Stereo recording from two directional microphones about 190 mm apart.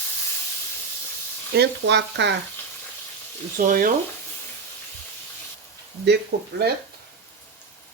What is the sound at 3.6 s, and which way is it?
Speech, 45° right (ahead or behind).